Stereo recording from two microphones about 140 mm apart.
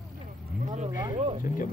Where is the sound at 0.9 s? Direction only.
30° right (ahead or behind).